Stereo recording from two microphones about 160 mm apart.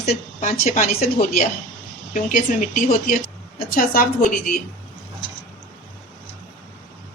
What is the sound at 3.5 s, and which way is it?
Speech, 65° left (ahead or behind).